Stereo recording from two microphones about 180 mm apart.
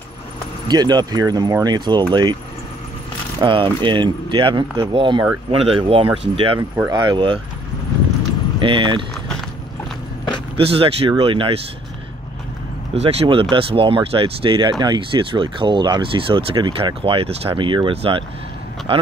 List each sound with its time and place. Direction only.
0.7 s speech: 25° right (ahead or behind)
3.3 s speech: 25° right (ahead or behind)
8.5 s speech: 25° right (ahead or behind)
10.6 s speech: 30° right (ahead or behind)
12.9 s speech: 35° right (ahead or behind)